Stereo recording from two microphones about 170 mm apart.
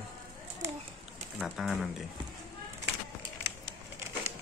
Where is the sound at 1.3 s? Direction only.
Centre (ahead or behind).